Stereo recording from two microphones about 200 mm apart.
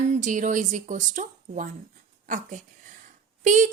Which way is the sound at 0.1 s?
40° right (ahead or behind).